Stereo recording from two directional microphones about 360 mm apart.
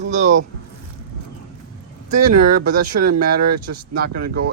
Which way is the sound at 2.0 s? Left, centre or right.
Right.